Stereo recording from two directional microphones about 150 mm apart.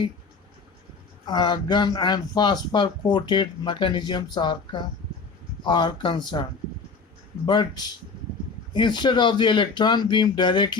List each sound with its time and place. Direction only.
1.3 s speech: 30° left (ahead or behind)
7.4 s speech: 30° left (ahead or behind)